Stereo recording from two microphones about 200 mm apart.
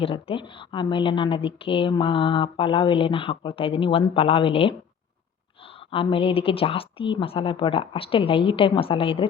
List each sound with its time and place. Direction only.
0.0 s a woman's voice: 25° left (ahead or behind)
5.9 s a woman's voice: 25° left (ahead or behind)